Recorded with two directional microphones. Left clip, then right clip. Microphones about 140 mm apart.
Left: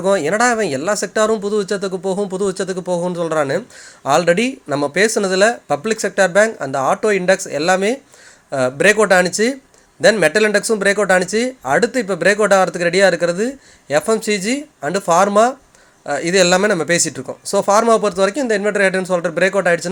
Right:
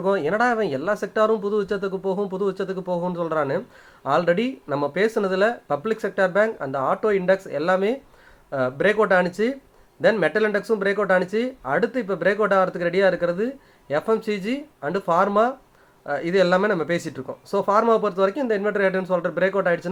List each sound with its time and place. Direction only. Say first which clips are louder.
0.0 s speech: left 6 dB; 25° left (ahead or behind)